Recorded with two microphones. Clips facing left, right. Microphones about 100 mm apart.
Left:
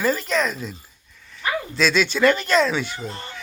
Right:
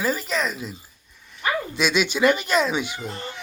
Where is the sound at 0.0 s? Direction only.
5° right (ahead or behind).